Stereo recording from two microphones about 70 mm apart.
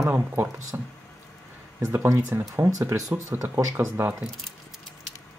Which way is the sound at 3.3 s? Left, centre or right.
Right.